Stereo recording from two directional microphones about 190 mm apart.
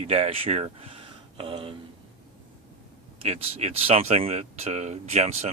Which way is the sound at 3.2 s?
35° right (ahead or behind).